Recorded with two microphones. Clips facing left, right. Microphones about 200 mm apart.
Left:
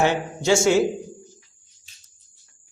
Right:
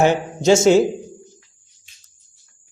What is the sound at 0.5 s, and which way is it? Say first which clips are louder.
Speech: right 5 dB; 20° right (ahead or behind).